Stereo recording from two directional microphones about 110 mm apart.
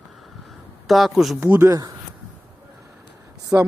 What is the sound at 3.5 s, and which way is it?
Speech, 30° right (ahead or behind).